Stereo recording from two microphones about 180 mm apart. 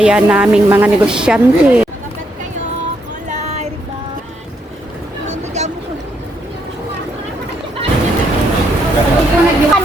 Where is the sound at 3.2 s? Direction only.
40° right (ahead or behind).